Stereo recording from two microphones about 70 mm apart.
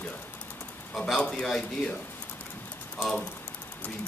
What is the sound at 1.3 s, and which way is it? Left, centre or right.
Speech, centre.